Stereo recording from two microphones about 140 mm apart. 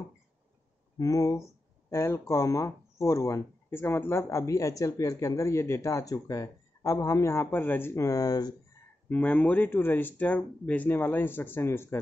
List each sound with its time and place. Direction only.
0.9 s speech: 25° left (ahead or behind)
9.1 s speech: 10° left (ahead or behind)